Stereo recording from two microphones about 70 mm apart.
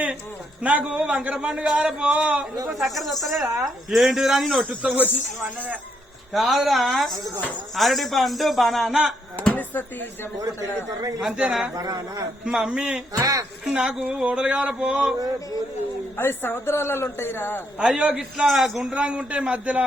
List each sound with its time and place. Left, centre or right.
0.6 s a man's voice: right
2.8 s a man's voice: centre
4.7 s speech: right
6.3 s a man's voice: centre
9.5 s a sound: left
11.2 s a man's voice: centre
11.8 s a sound: right
12.5 s a man's voice: centre
13.1 s a sound: right
13.7 s a man's voice: centre
16.1 s a man's voice: left
17.7 s a man's voice: centre